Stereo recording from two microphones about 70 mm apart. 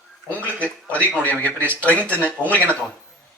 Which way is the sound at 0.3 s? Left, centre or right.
Left.